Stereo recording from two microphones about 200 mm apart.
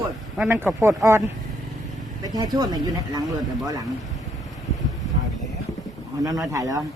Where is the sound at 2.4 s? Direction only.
20° right (ahead or behind).